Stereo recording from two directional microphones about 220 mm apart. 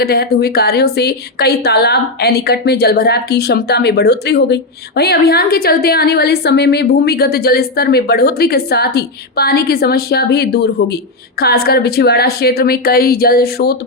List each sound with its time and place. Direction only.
0.0 s a woman's voice: 45° left (ahead or behind)